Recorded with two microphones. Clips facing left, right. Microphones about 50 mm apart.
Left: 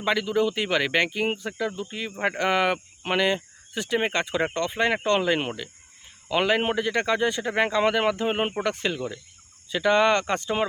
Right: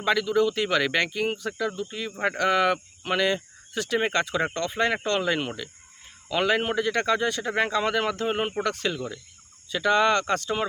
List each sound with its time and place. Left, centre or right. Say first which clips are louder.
0.0 s a man's voice: right 1 dB; centre